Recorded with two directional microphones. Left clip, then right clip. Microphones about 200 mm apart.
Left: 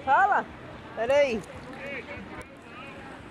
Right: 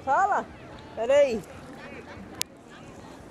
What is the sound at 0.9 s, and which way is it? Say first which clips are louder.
Speech: right 2 dB; 20° right (ahead or behind).